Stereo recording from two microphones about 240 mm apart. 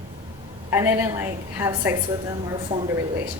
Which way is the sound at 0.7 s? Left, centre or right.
Centre.